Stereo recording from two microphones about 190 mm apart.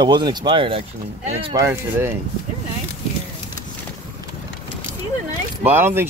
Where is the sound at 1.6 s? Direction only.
15° right (ahead or behind).